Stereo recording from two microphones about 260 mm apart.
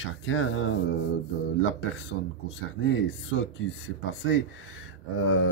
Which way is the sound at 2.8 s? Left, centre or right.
Left.